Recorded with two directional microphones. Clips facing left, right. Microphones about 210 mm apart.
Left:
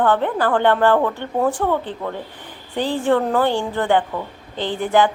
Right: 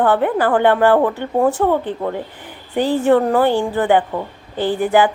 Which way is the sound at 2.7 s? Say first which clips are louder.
Right 4 dB; 10° right (ahead or behind).